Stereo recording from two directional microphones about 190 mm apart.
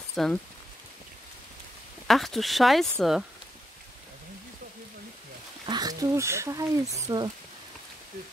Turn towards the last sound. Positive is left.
turn(degrees=-20)  # may be behind; listen again after turning